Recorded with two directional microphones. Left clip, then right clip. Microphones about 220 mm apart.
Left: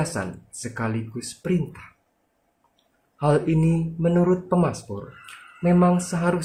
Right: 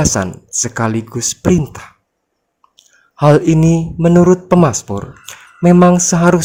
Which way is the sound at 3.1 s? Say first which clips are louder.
Right 11 dB; 50° right (ahead or behind).